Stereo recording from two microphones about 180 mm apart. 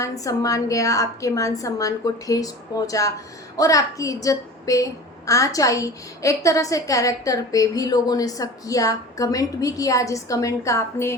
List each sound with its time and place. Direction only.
0.0 s a woman's voice: 20° left (ahead or behind)